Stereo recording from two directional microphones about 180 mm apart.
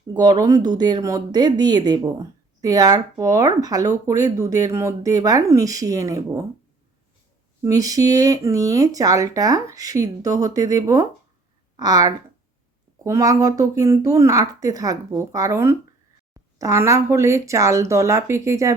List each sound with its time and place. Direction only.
0.1 s speech: 20° right (ahead or behind)
7.6 s speech: 20° right (ahead or behind)